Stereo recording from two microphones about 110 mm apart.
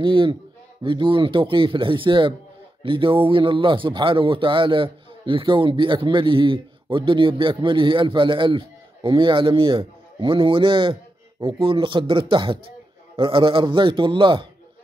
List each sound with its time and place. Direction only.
0.0 s speech: 50° right (ahead or behind)